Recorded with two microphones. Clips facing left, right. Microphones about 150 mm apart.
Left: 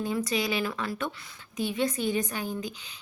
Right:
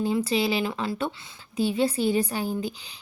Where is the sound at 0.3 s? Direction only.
30° right (ahead or behind).